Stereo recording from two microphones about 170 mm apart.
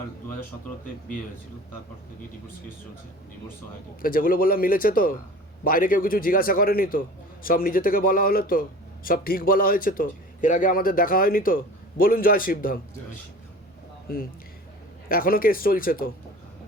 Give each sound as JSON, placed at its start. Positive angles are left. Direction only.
{"t": 4.0, "sound": "a man's voice", "side_deg": 55}
{"t": 14.1, "sound": "a man's voice", "side_deg": 60}